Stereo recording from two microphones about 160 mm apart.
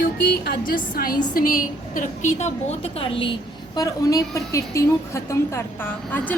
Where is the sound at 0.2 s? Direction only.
85° left.